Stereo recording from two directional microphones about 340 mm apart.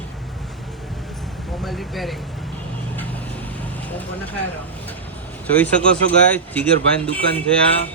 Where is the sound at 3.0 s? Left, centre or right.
Centre.